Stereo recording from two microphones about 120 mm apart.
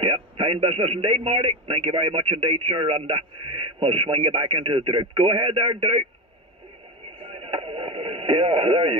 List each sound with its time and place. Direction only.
0.0 s speech: 50° right (ahead or behind)
7.2 s radio: 50° right (ahead or behind)